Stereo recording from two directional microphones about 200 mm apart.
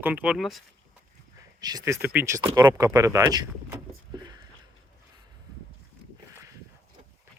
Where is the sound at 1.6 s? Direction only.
15° right (ahead or behind).